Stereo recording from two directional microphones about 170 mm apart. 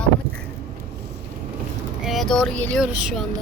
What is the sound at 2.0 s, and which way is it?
Speech, centre (ahead or behind).